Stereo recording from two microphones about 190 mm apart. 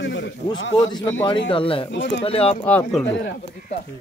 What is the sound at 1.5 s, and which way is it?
Speech, 30° left (ahead or behind).